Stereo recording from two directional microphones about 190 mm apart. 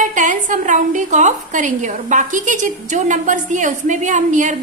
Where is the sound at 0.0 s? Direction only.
40° right (ahead or behind).